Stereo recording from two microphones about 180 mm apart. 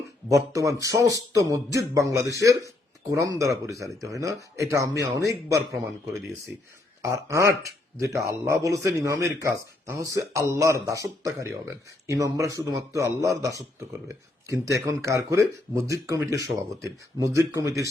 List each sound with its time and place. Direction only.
0.3 s speech: 15° right (ahead or behind)
5.7 s a man's voice: centre (ahead or behind)
7.0 s speech: 15° right (ahead or behind)